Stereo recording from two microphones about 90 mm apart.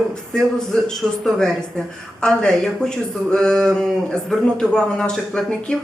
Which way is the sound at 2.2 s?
5° left (ahead or behind).